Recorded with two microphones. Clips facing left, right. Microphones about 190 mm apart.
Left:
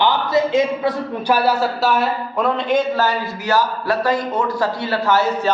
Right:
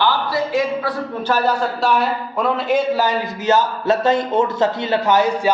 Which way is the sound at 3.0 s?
20° right (ahead or behind).